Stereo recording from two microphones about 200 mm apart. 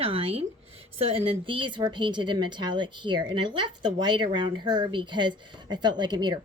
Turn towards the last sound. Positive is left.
turn(degrees=-20)  # may be behind; listen again after turning